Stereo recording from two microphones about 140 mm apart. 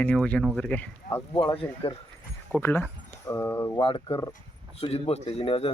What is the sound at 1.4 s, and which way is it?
Speech, 35° left (ahead or behind).